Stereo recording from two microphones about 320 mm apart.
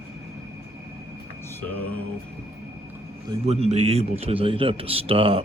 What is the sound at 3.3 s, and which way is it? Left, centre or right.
A man's voice, centre.